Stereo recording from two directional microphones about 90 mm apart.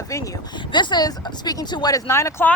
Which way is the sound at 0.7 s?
55° left (ahead or behind).